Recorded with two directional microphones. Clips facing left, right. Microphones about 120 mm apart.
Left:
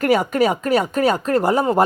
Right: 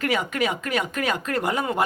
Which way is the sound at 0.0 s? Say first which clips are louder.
Left 8 dB; 40° left (ahead or behind).